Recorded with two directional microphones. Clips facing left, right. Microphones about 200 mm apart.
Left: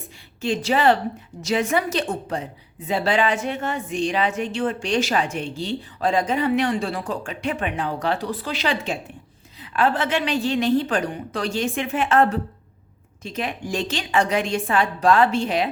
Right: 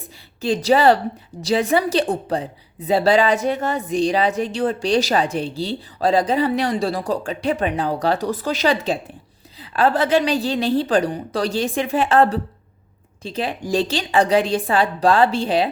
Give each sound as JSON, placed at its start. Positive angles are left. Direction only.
{"t": 0.4, "sound": "a woman's voice", "side_deg": -35}